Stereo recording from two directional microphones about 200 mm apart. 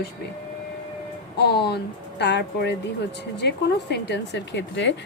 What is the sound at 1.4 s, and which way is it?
A woman's voice, 55° left (ahead or behind).